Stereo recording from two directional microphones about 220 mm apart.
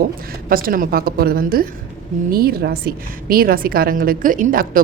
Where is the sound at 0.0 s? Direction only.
40° right (ahead or behind).